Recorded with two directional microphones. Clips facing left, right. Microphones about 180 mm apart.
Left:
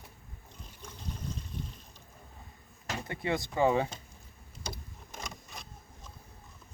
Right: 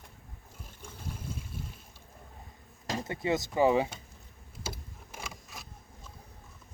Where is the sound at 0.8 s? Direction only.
10° right (ahead or behind).